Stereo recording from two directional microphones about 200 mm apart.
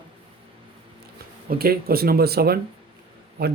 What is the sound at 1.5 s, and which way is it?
Speech, 50° right (ahead or behind).